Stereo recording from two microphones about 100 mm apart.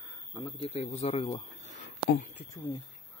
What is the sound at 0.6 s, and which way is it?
Speech, 90° left.